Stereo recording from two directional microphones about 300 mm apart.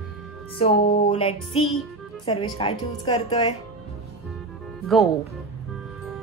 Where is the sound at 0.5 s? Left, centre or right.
Centre.